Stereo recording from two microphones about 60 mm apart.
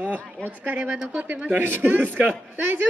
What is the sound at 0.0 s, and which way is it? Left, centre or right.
Speech, right.